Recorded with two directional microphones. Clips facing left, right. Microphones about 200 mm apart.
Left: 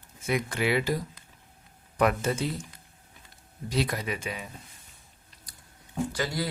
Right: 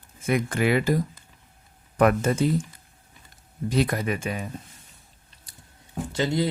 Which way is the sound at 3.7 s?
50° right (ahead or behind).